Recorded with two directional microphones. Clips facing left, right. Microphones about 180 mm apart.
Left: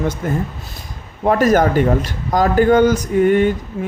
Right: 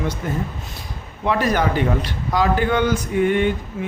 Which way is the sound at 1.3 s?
45° left (ahead or behind).